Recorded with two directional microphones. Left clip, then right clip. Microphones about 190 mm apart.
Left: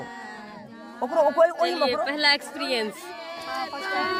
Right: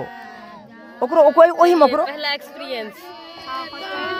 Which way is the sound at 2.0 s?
25° left (ahead or behind).